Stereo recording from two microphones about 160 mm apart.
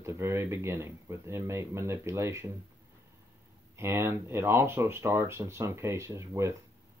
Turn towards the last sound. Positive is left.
turn(degrees=-20)  # may be behind; listen again after turning